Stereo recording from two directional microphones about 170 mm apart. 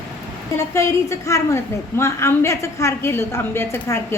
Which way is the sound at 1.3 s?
15° left (ahead or behind).